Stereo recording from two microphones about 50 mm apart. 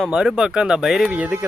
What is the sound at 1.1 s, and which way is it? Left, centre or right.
Speech, right.